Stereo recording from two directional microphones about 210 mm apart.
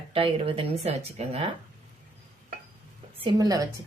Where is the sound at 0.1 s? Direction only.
25° right (ahead or behind).